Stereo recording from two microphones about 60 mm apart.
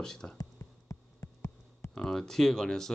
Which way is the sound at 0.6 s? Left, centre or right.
Left.